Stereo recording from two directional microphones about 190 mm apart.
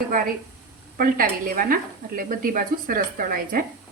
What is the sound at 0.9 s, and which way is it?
Speech, 50° right (ahead or behind).